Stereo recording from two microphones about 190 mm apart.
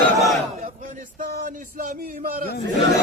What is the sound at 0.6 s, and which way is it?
A man's voice, 45° right (ahead or behind).